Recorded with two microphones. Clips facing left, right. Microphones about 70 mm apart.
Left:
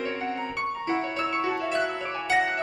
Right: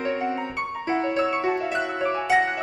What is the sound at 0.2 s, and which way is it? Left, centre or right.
Music, centre.